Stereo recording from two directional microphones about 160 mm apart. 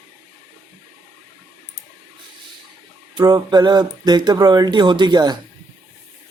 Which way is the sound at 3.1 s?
25° right (ahead or behind).